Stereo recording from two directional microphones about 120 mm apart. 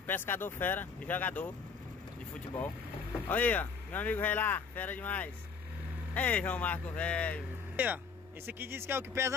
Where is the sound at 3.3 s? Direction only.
15° left (ahead or behind).